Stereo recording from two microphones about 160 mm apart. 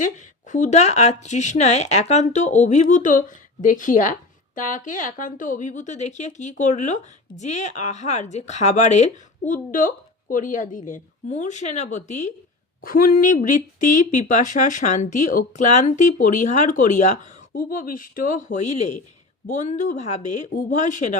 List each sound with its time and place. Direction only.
0.0 s a woman's voice: 50° left (ahead or behind)
12.8 s a woman's voice: 60° left (ahead or behind)